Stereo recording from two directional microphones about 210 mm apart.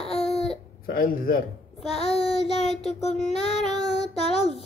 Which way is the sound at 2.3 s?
30° left (ahead or behind).